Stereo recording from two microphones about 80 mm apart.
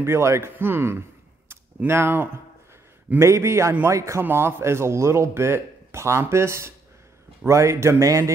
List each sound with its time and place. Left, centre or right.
0.0 s a man's voice: right